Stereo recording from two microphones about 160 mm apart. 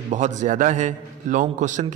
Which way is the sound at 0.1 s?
50° right (ahead or behind).